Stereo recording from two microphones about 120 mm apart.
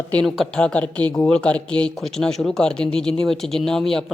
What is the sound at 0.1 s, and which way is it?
Speech, 5° left (ahead or behind).